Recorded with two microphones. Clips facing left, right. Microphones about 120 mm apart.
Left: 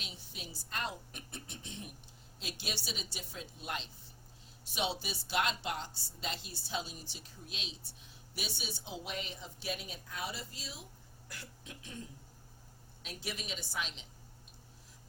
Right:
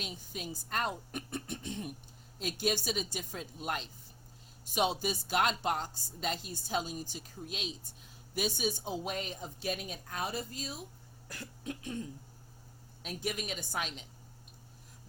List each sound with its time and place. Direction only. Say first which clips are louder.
0.0 s speech: right 7 dB; 45° right (ahead or behind)